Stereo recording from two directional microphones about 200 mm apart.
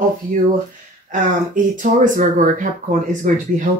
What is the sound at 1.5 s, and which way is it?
Speech, 40° right (ahead or behind).